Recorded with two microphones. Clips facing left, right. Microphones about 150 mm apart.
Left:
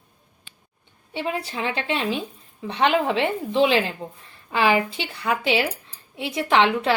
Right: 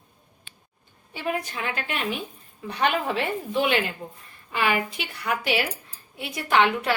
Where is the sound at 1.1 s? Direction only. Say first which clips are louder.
Left 2 dB; 25° left (ahead or behind).